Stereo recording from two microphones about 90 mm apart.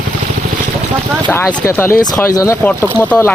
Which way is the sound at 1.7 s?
25° left (ahead or behind).